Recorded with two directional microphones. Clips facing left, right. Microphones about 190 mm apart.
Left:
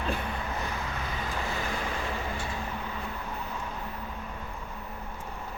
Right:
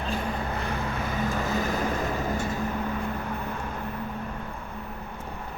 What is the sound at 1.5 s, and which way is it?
Vehicle, 40° right (ahead or behind).